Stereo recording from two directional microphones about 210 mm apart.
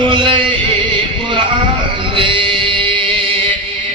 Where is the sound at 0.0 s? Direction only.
25° right (ahead or behind).